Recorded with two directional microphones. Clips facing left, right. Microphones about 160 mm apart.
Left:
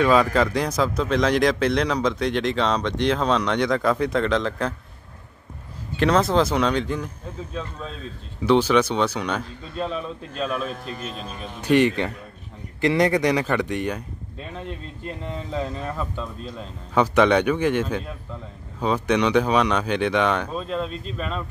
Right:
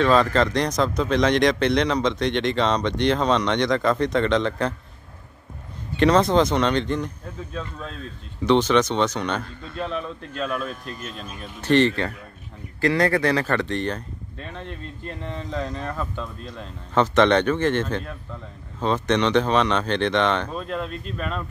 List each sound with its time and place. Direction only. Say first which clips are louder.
0.0 s speech: even; 10° left (ahead or behind)
5.9 s speech: right 2 dB; centre (ahead or behind)
8.5 s a man's voice: even; 10° left (ahead or behind)
11.6 s a man's voice: even; 10° left (ahead or behind)